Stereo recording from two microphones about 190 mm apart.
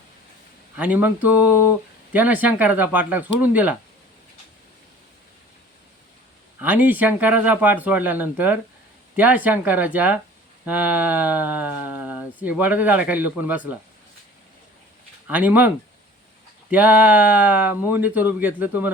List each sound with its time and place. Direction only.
0.8 s speech: 10° right (ahead or behind)
6.6 s speech: 10° right (ahead or behind)
15.3 s speech: 10° right (ahead or behind)
16.7 s speech: 10° right (ahead or behind)